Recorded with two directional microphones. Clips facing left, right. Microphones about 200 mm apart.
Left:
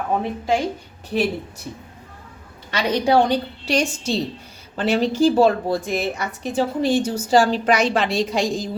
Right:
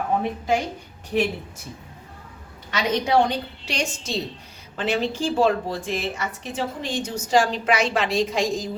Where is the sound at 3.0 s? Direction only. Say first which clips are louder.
Left 5 dB; 35° left (ahead or behind).